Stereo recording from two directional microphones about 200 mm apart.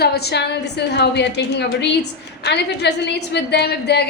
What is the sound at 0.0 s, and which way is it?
A woman's voice, 55° left (ahead or behind).